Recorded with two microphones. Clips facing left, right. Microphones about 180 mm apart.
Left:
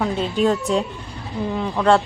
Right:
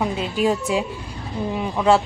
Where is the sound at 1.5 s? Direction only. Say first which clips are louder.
Even; 15° right (ahead or behind).